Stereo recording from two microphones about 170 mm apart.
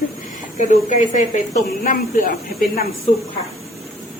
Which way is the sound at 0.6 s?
45° left (ahead or behind).